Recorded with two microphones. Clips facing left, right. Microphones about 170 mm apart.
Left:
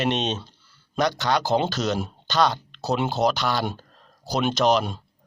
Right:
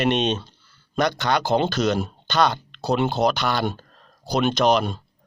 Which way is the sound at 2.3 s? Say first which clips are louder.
Right 1 dB; 60° right (ahead or behind).